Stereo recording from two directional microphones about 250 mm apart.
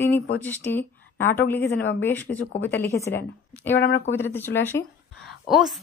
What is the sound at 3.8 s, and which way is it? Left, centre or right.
Speech, left.